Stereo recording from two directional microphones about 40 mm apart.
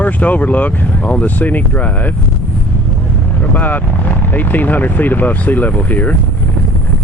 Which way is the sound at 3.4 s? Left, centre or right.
Left.